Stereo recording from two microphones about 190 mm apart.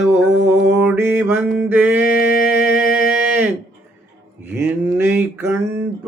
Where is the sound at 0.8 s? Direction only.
10° right (ahead or behind).